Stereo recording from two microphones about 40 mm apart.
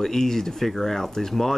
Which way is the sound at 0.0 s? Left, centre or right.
Centre.